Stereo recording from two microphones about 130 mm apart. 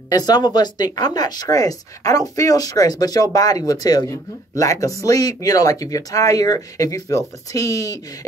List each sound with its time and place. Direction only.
0.1 s speech: 30° left (ahead or behind)